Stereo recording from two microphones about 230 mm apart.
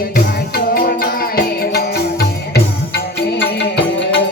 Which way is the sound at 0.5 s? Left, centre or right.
Left.